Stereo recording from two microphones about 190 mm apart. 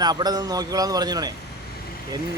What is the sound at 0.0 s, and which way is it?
Speech, 20° right (ahead or behind).